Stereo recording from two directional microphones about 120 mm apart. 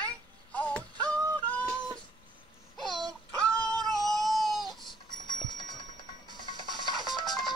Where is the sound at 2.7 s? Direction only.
Centre (ahead or behind).